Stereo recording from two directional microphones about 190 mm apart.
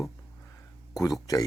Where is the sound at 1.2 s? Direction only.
20° left (ahead or behind).